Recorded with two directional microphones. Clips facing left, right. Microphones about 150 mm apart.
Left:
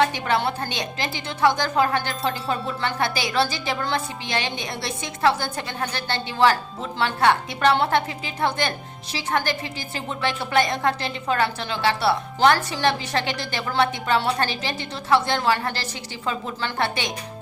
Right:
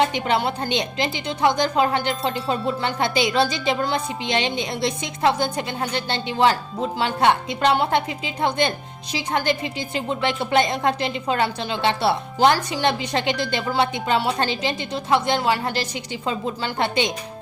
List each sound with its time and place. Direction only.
0.0 s a woman's voice: 20° right (ahead or behind)